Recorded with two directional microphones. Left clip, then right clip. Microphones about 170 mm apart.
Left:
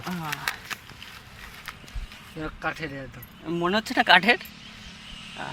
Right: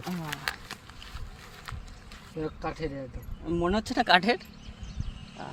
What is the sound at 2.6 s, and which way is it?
Speech, 25° right (ahead or behind).